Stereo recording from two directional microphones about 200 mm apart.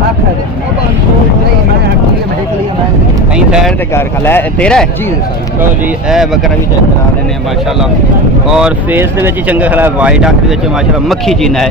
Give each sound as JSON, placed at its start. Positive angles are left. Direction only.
{"t": 3.3, "sound": "a sound", "side_deg": -5}
{"t": 3.9, "sound": "speech", "side_deg": 10}
{"t": 6.0, "sound": "speech", "side_deg": 0}
{"t": 8.5, "sound": "speech", "side_deg": -5}